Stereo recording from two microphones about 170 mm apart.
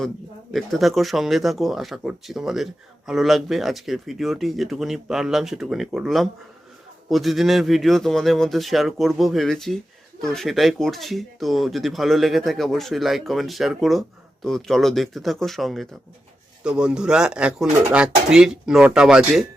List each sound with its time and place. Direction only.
0.5 s speech: centre (ahead or behind)